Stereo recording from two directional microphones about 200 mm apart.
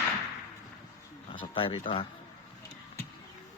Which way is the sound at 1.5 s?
25° left (ahead or behind).